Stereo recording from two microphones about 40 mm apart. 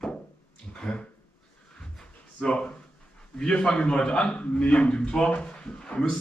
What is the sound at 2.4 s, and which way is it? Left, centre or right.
A man's voice, left.